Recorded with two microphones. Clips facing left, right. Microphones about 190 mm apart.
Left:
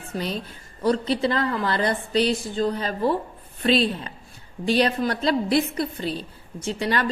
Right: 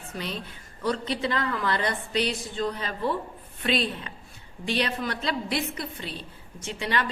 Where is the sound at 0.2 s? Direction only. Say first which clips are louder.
Left 5 dB; 35° left (ahead or behind).